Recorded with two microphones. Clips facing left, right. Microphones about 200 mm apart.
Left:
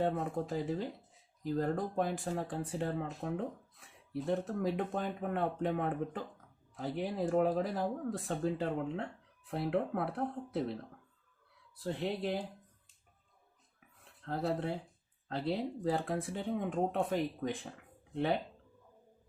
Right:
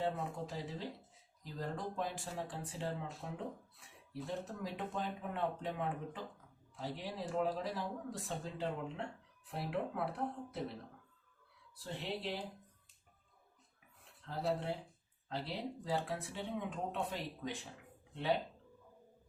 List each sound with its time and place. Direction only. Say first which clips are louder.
0.0 s speech: left 5 dB; 50° left (ahead or behind)
4.1 s speech: left 8 dB; 55° left (ahead or behind)
11.8 s speech: left 6 dB; 50° left (ahead or behind)
14.3 s speech: left 3 dB; 55° left (ahead or behind)